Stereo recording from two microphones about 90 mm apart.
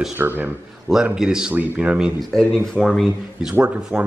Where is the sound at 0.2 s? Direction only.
20° right (ahead or behind).